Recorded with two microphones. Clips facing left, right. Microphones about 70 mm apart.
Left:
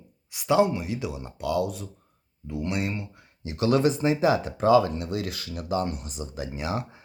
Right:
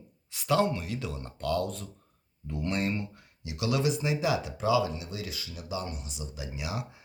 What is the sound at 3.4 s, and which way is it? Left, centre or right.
Speech, left.